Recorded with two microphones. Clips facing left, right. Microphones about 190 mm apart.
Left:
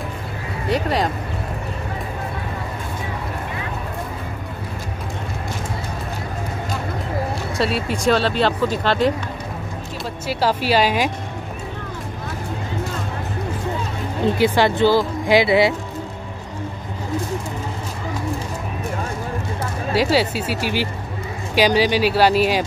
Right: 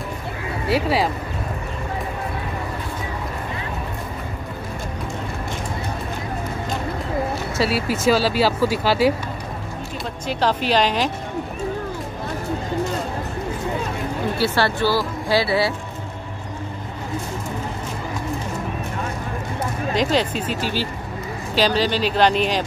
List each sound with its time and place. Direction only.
0.7 s speech: 5° right (ahead or behind)
7.5 s speech: 5° right (ahead or behind)
10.2 s speech: 5° left (ahead or behind)
14.2 s speech: 15° left (ahead or behind)
19.9 s speech: 5° left (ahead or behind)